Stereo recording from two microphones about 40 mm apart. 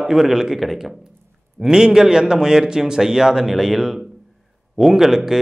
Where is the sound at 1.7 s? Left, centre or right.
Centre.